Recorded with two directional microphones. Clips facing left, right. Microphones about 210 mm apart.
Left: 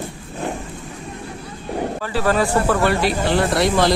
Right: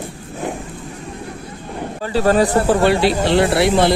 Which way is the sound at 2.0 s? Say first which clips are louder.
Right 6 dB; 30° right (ahead or behind).